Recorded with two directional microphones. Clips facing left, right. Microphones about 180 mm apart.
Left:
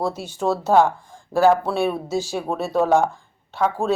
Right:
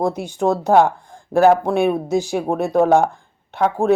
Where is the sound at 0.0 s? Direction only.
15° right (ahead or behind).